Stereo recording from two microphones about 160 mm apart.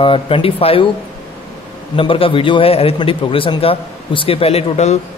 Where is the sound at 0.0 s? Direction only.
35° left (ahead or behind).